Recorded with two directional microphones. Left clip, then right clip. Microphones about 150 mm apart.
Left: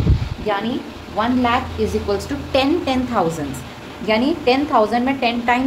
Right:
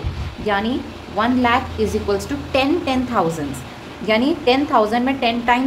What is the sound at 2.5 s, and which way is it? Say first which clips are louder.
A woman's voice: left 1 dB; 5° left (ahead or behind).